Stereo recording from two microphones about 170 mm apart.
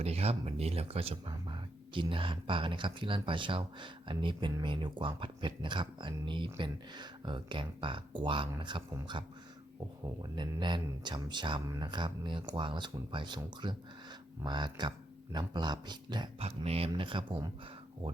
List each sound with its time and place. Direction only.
0.0 s speech: 35° right (ahead or behind)
10.3 s speech: 25° right (ahead or behind)
16.4 s speech: 35° right (ahead or behind)